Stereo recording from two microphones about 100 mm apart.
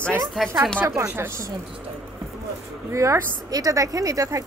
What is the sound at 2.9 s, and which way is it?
Speech, 35° right (ahead or behind).